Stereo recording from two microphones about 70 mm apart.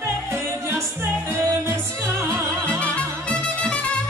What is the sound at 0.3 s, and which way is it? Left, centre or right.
Music, right.